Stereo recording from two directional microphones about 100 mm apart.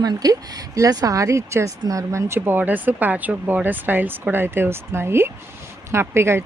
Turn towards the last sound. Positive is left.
turn(degrees=-25)  # may be behind; listen again after turning